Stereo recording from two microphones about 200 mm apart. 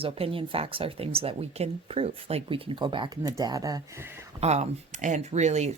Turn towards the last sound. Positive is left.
turn(degrees=-35)  # may be behind; listen again after turning